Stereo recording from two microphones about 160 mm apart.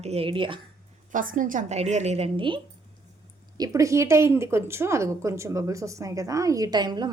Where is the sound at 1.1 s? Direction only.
55° right (ahead or behind); by 2.6 s 30° right (ahead or behind).